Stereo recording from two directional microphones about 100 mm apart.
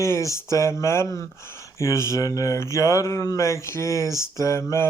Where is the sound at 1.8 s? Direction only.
30° left (ahead or behind).